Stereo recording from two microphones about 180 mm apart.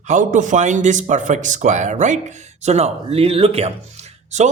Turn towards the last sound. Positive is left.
turn(degrees=-40)  # may be behind; listen again after turning